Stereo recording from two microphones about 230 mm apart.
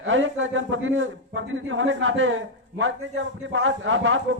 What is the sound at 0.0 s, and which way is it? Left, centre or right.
A man's voice, right.